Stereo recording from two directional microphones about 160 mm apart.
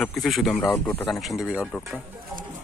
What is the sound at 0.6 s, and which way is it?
Speech, 15° left (ahead or behind).